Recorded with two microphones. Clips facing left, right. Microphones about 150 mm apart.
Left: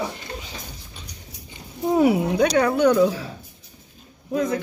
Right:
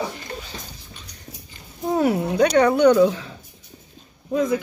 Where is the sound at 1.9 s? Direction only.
10° left (ahead or behind).